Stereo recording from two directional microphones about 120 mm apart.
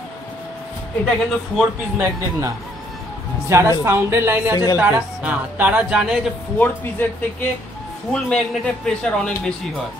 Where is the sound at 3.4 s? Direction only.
25° right (ahead or behind).